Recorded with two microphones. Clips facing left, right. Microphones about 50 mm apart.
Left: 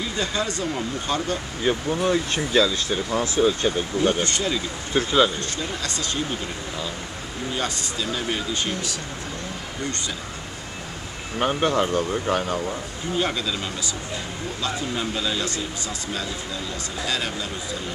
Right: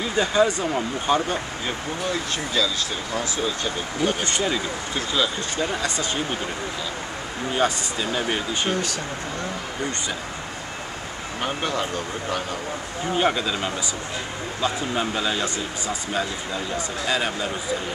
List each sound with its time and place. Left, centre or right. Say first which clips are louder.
0.0 s speech: right 6 dB; centre
2.0 s speech: left 4 dB; left
4.2 s speech: even; centre
4.9 s speech: left 6 dB; left
5.6 s speech: right 4 dB; right
7.5 s speech: right 6 dB; right
11.3 s speech: left 5 dB; centre
13.1 s speech: right 3 dB; right